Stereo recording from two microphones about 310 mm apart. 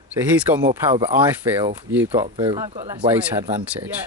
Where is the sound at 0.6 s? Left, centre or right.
Centre.